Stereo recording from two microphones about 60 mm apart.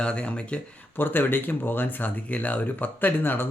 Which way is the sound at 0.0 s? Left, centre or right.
Centre.